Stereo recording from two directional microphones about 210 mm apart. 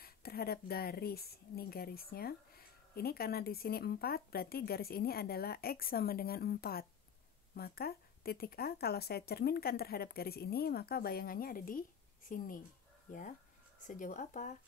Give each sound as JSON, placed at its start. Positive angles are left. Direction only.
{"t": 0.0, "sound": "speech", "side_deg": 45}